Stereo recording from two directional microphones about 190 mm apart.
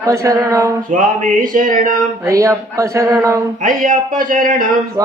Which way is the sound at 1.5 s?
45° right (ahead or behind).